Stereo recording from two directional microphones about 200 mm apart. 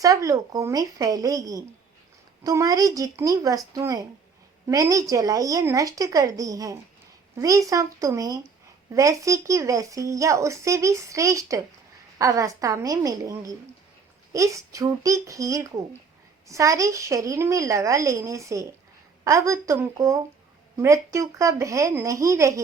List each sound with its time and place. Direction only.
0.0 s speech: 15° right (ahead or behind)